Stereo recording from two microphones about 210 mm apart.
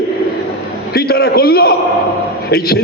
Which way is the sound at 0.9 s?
50° left (ahead or behind).